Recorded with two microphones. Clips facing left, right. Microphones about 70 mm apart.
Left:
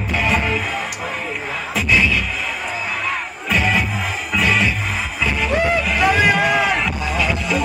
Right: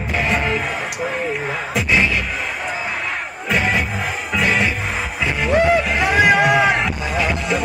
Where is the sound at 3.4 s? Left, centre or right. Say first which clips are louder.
Even; right.